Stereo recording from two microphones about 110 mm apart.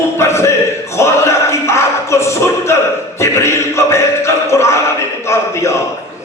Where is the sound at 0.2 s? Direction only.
25° left (ahead or behind).